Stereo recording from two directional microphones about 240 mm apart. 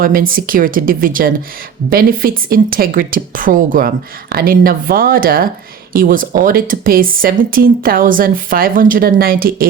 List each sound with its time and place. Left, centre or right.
0.0 s speech: right